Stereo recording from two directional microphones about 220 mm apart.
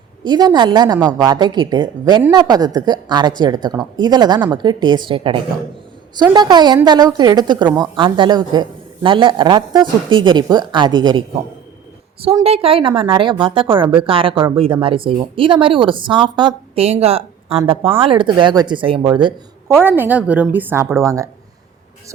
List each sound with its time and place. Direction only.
0.3 s a woman's voice: 20° right (ahead or behind)
12.2 s a woman's voice: 25° right (ahead or behind)
19.7 s a woman's voice: 10° right (ahead or behind)